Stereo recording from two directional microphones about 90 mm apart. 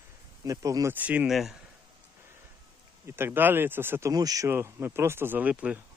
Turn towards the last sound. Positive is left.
turn(degrees=-15)  # may be behind; listen again after turning